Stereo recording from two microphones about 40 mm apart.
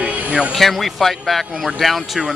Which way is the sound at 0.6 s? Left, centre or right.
Centre.